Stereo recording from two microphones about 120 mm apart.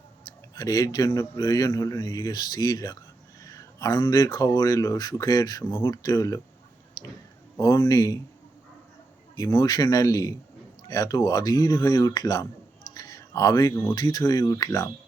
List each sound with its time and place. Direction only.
0.5 s speech: 30° left (ahead or behind)
3.4 s a sound: 30° left (ahead or behind)
4.1 s speech: 30° left (ahead or behind)
5.7 s speech: 20° left (ahead or behind)
7.6 s speech: 30° left (ahead or behind)
9.6 s speech: 30° left (ahead or behind)